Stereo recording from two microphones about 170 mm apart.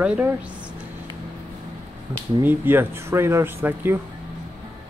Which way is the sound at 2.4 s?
10° right (ahead or behind).